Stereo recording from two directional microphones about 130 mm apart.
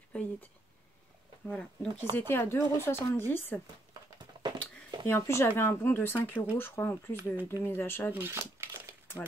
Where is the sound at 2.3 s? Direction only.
15° left (ahead or behind).